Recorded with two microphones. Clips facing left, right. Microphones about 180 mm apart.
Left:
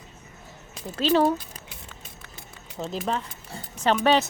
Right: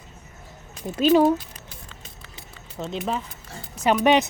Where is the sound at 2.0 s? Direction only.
50° left (ahead or behind).